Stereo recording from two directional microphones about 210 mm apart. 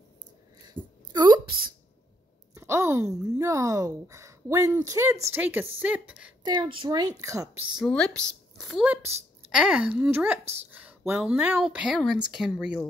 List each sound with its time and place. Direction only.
0.7 s a sound: 20° right (ahead or behind)
2.5 s speech: 15° right (ahead or behind)
6.4 s a child's voice: 20° right (ahead or behind)
7.7 s a woman's voice: 5° left (ahead or behind)
10.4 s speech: 30° right (ahead or behind)
10.7 s a woman's voice: 5° right (ahead or behind)